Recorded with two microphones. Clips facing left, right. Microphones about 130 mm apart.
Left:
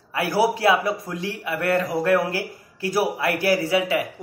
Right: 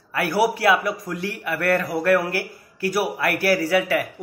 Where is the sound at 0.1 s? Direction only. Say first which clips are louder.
Even; 25° left (ahead or behind).